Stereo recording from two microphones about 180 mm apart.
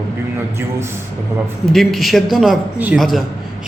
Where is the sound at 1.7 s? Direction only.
Centre (ahead or behind).